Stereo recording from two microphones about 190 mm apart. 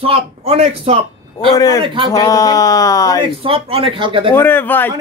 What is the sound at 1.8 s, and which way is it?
Speech, 25° right (ahead or behind).